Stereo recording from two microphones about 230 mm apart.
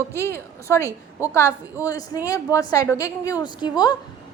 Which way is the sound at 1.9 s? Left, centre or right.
Centre.